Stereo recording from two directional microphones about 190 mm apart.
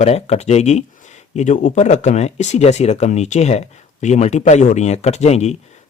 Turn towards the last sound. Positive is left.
turn(degrees=35)  # may be behind; listen again after turning